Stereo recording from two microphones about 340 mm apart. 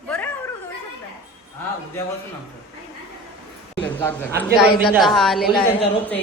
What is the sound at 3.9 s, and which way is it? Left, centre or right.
A woman's voice, centre.